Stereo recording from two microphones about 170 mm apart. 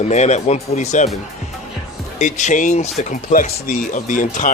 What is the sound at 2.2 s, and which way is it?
Speech, 45° left (ahead or behind).